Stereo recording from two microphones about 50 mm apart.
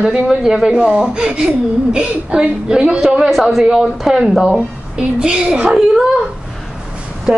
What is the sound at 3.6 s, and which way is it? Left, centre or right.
Speech, centre.